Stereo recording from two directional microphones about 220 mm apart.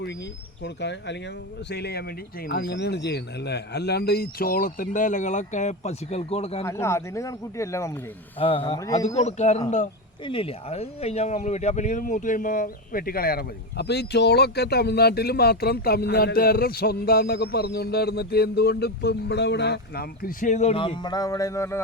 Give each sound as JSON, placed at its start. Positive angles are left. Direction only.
{"t": 0.6, "sound": "speech", "side_deg": 50}
{"t": 6.7, "sound": "speech", "side_deg": 10}
{"t": 8.4, "sound": "a man's voice", "side_deg": 25}